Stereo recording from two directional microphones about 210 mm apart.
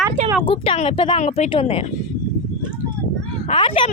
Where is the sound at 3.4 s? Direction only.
25° left (ahead or behind).